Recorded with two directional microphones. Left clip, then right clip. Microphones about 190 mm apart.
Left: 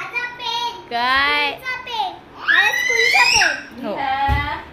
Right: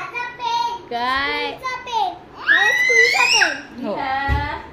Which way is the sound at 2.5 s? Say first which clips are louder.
Right 2 dB; 35° right (ahead or behind).